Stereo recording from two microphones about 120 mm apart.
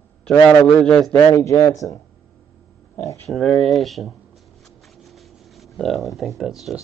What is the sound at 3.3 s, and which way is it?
Speech, centre (ahead or behind).